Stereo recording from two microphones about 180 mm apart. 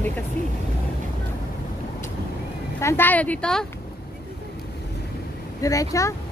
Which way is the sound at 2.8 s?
15° left (ahead or behind).